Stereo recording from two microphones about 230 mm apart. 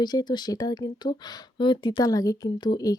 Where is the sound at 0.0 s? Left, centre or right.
Centre.